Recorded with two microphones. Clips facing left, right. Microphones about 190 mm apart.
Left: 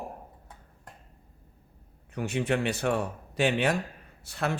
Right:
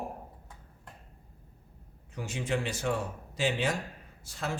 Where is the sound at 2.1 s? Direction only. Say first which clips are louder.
Left 5 dB; 60° left (ahead or behind).